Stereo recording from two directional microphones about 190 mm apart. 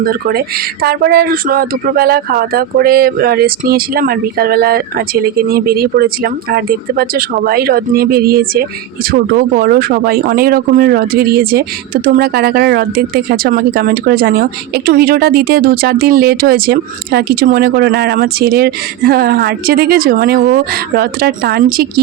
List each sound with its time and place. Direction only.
0.0 s speech: 50° right (ahead or behind)